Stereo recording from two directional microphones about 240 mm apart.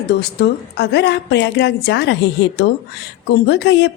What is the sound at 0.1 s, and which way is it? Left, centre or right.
Speech, left.